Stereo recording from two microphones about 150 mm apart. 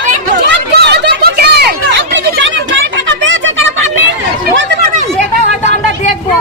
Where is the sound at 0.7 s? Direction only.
90° right.